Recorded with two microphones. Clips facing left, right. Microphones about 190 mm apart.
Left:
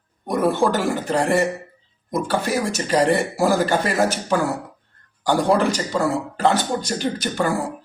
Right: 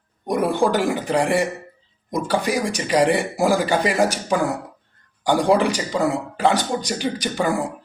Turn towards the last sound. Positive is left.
turn(degrees=-15)  # may be behind; listen again after turning